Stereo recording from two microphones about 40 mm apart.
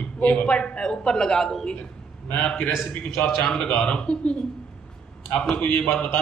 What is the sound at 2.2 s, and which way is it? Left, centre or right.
A man's voice, left.